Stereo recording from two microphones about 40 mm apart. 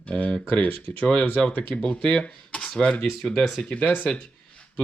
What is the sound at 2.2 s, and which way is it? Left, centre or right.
Speech, left.